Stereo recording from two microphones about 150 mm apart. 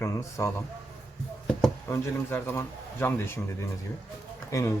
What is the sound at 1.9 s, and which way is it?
Speech, 15° left (ahead or behind).